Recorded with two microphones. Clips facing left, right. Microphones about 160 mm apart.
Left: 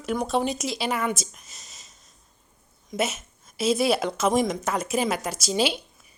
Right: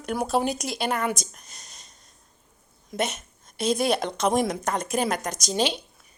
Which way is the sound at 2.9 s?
5° left (ahead or behind).